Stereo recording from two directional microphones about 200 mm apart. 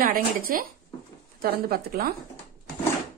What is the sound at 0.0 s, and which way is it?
A woman's voice, 45° right (ahead or behind).